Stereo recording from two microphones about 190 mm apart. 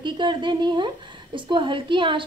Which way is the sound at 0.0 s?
25° right (ahead or behind).